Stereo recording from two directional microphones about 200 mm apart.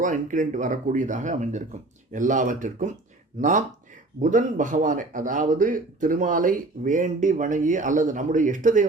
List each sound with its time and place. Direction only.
0.0 s a man's voice: 40° right (ahead or behind)